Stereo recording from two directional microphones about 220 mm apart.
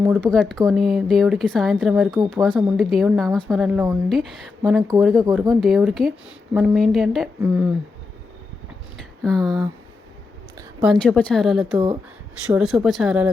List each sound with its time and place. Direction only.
0.2 s a woman's voice: 5° left (ahead or behind)
9.2 s a woman's voice: centre (ahead or behind)
10.8 s a woman's voice: 5° left (ahead or behind)